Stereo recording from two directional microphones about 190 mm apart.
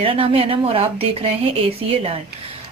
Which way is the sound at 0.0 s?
30° right (ahead or behind).